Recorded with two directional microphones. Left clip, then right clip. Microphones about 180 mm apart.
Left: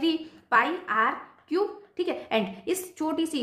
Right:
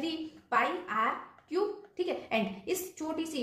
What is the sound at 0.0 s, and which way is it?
A woman's voice, 40° left (ahead or behind).